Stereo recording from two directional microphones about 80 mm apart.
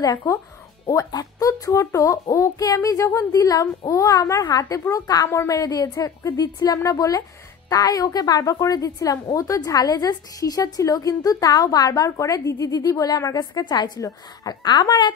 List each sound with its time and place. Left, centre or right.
1.1 s a woman's voice: left
5.3 s speech: left
5.6 s a woman's voice: left